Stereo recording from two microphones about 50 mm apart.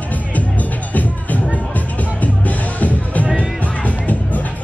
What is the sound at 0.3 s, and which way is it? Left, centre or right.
Music, left.